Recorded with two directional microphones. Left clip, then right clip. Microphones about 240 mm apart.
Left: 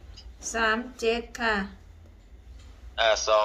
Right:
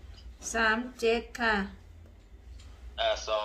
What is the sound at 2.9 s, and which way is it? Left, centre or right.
Speech, left.